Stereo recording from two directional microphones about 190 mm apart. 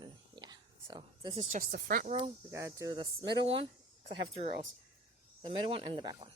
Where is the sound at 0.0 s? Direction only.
20° right (ahead or behind).